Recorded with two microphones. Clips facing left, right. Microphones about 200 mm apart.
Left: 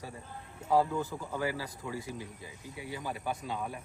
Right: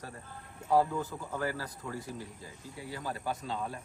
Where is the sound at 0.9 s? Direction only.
5° left (ahead or behind).